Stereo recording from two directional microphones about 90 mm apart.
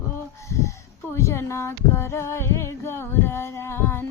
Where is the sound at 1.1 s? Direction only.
35° left (ahead or behind).